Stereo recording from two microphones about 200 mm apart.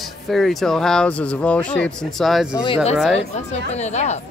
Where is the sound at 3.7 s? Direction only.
35° left (ahead or behind).